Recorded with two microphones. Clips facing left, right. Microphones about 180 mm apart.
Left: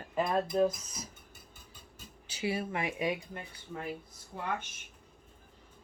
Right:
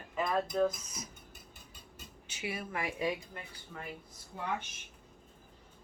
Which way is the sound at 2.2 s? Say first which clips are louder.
Left 6 dB; 30° left (ahead or behind).